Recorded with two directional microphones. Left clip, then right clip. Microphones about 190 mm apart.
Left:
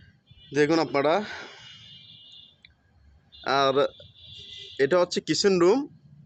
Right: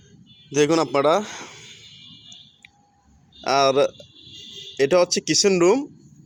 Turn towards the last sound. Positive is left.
turn(degrees=-15)  # may be behind; listen again after turning